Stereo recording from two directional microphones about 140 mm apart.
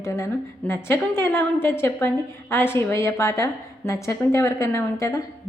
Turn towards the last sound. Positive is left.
turn(degrees=20)  # may be behind; listen again after turning